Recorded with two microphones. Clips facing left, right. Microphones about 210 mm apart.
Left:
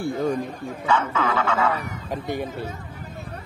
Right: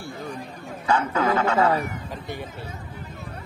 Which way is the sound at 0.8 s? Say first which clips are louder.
Right 1 dB; 40° right (ahead or behind).